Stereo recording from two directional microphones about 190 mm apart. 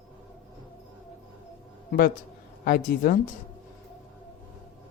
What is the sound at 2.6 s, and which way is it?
Speech, 50° left (ahead or behind).